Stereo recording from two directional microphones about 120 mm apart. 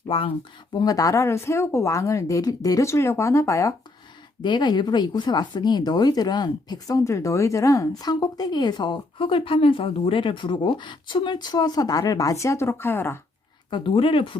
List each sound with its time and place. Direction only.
0.1 s speech: 50° left (ahead or behind)
0.7 s speech: 30° left (ahead or behind)
4.4 s speech: 40° left (ahead or behind); by 13.1 s 20° left (ahead or behind)
13.7 s speech: 45° left (ahead or behind)